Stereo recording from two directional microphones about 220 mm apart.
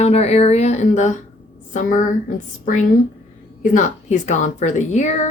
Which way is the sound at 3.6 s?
35° left (ahead or behind).